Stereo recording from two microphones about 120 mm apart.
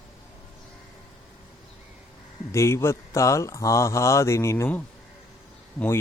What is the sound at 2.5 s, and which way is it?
Speech, 25° left (ahead or behind).